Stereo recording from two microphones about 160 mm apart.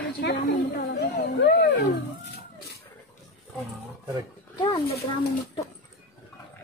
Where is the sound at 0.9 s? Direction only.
70° left (ahead or behind).